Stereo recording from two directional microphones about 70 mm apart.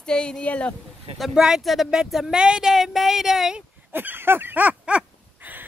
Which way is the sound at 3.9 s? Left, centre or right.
Right.